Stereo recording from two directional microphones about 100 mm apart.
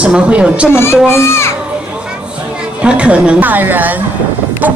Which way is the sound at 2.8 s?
10° right (ahead or behind).